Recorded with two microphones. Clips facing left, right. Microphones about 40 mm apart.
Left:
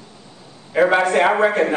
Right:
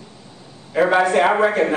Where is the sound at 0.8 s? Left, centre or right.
Centre.